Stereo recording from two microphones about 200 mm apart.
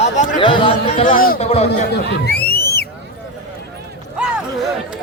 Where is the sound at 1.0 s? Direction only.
45° left (ahead or behind).